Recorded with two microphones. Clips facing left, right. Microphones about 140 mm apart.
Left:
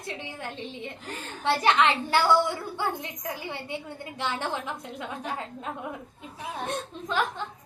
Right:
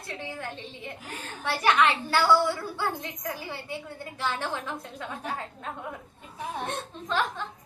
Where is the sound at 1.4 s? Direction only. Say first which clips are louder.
Left 1 dB; 25° left (ahead or behind).